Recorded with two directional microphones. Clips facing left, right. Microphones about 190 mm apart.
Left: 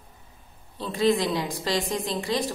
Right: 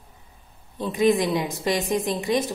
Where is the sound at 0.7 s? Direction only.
20° right (ahead or behind).